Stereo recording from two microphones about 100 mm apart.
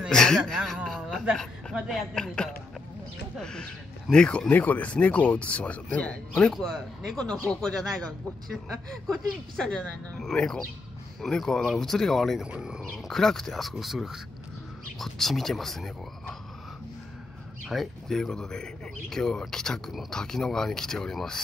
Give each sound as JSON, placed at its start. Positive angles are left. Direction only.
{"t": 0.1, "sound": "speech", "side_deg": 5}
{"t": 0.8, "sound": "a sound", "side_deg": 0}
{"t": 1.3, "sound": "speech", "side_deg": 5}
{"t": 2.1, "sound": "speech", "side_deg": 10}
{"t": 9.0, "sound": "speech", "side_deg": 5}
{"t": 12.4, "sound": "speech", "side_deg": -10}
{"t": 13.1, "sound": "speech", "side_deg": 5}
{"t": 17.6, "sound": "speech", "side_deg": 5}